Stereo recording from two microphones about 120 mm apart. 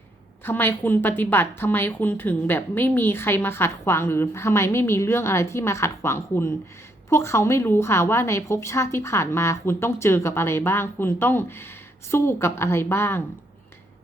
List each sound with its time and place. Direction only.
0.4 s a woman's voice: 15° left (ahead or behind)